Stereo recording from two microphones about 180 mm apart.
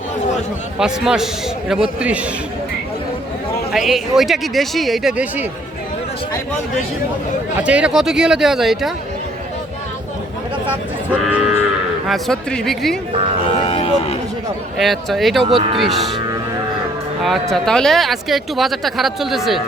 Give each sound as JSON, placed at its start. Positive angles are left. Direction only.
{"t": 0.8, "sound": "speech", "side_deg": -5}
{"t": 3.7, "sound": "speech", "side_deg": 0}
{"t": 7.6, "sound": "speech", "side_deg": -5}
{"t": 11.3, "sound": "livestock", "side_deg": -10}
{"t": 12.0, "sound": "speech", "side_deg": 0}
{"t": 13.7, "sound": "cattle", "side_deg": 30}
{"t": 14.8, "sound": "speech", "side_deg": 0}
{"t": 15.4, "sound": "speech", "side_deg": -30}
{"t": 15.8, "sound": "speech", "side_deg": 0}
{"t": 17.5, "sound": "speech", "side_deg": 5}